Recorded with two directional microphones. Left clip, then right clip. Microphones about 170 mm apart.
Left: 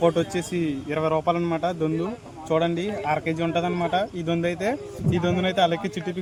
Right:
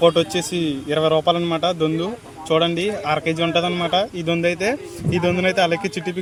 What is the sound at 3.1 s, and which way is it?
Speech, 25° right (ahead or behind).